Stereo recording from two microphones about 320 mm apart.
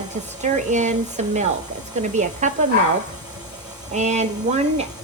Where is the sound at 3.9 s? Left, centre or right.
Right.